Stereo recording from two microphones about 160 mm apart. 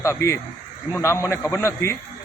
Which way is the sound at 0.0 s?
15° left (ahead or behind).